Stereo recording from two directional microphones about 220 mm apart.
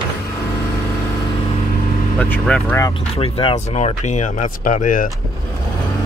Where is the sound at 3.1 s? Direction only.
25° left (ahead or behind).